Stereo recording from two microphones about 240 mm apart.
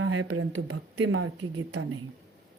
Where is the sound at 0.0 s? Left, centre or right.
Right.